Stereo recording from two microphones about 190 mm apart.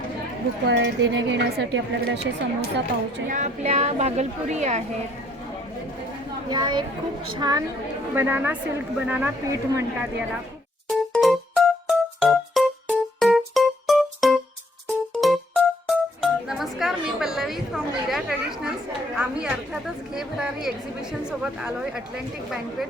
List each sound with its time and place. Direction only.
0.7 s speech: 75° right (ahead or behind)
3.2 s a woman's voice: 40° right (ahead or behind)
6.5 s speech: 25° right (ahead or behind)
8.1 s speech: 10° right (ahead or behind)
10.8 s music: centre (ahead or behind)
19.1 s a woman's voice: 5° right (ahead or behind)